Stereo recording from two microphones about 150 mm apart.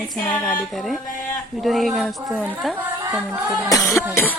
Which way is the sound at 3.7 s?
20° left (ahead or behind).